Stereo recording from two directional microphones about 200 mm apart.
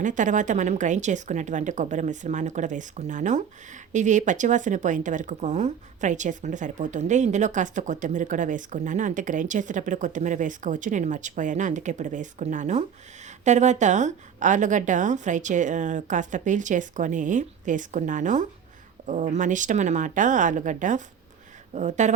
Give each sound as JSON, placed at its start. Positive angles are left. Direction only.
{"t": 0.0, "sound": "speech", "side_deg": -40}